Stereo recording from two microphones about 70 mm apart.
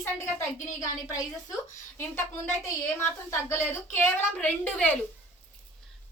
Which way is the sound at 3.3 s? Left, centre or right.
Left.